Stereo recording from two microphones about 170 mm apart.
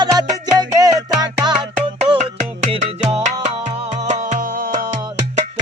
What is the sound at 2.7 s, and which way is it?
Music, 35° right (ahead or behind).